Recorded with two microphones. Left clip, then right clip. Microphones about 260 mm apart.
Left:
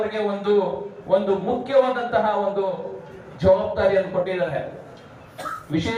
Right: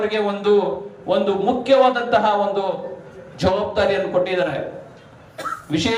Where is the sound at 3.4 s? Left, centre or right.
Right.